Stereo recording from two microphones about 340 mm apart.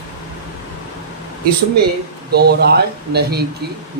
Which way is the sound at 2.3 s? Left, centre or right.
Right.